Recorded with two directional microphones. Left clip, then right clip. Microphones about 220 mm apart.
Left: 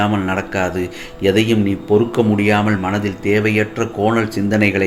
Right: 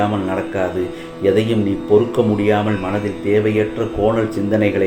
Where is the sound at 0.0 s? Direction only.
40° left (ahead or behind).